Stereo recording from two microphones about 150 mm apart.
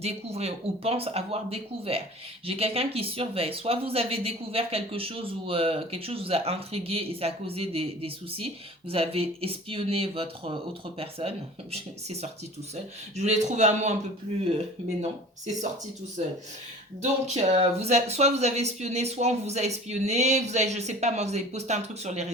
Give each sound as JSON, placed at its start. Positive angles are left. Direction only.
{"t": 0.0, "sound": "speech", "side_deg": -45}
{"t": 16.2, "sound": "speech", "side_deg": -50}